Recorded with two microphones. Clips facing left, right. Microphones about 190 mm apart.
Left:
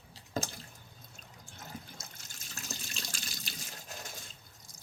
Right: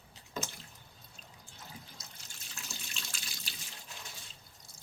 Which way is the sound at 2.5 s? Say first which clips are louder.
Left 4 dB; 45° left (ahead or behind).